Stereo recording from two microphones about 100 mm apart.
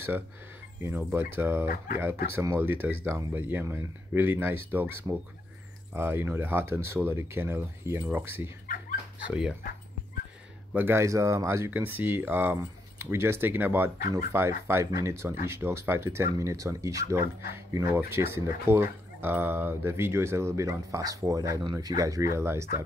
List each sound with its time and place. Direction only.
0.8 s speech: 20° right (ahead or behind)
9.3 s speech: 5° right (ahead or behind)
10.7 s speech: 15° right (ahead or behind)
11.0 s speech: 30° right (ahead or behind)